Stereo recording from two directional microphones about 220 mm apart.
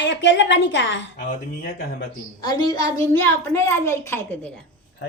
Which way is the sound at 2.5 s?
20° left (ahead or behind).